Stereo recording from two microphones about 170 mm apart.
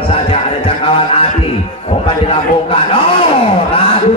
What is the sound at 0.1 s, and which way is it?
Music, 35° left (ahead or behind).